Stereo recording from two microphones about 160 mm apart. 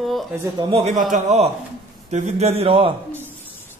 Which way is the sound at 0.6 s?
35° right (ahead or behind).